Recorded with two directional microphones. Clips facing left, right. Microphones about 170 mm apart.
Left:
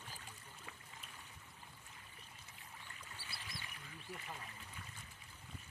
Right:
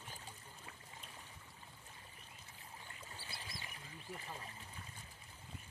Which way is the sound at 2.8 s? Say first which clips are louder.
Right 2 dB; 30° right (ahead or behind).